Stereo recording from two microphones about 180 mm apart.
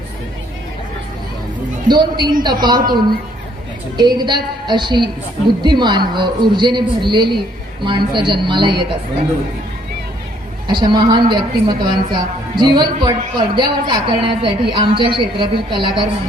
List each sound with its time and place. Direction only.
1.9 s a woman's voice: 25° right (ahead or behind)
10.7 s a woman's voice: 25° right (ahead or behind)